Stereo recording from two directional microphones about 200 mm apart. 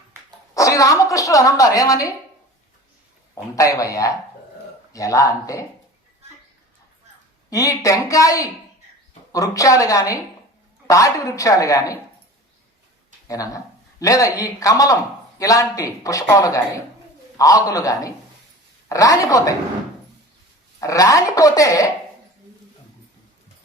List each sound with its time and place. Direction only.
0.5 s a woman's voice: 15° left (ahead or behind)
3.3 s a woman's voice: 15° left (ahead or behind)
7.5 s a woman's voice: 15° left (ahead or behind)
13.2 s a woman's voice: 15° left (ahead or behind)
20.8 s a woman's voice: 15° left (ahead or behind)